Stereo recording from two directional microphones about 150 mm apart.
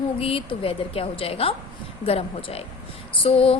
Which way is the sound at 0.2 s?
40° left (ahead or behind).